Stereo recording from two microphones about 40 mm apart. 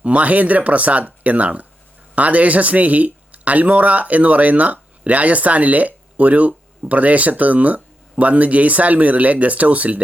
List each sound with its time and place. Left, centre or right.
0.0 s speech: right